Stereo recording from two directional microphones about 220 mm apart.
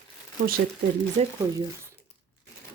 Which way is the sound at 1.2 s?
30° right (ahead or behind).